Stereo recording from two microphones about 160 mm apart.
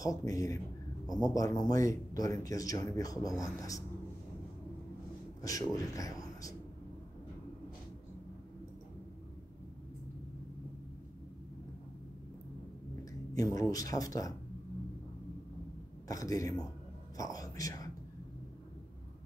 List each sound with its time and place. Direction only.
0.0 s speech: 20° left (ahead or behind)
5.4 s speech: 20° left (ahead or behind)
13.3 s speech: 20° left (ahead or behind)
16.1 s speech: 20° left (ahead or behind)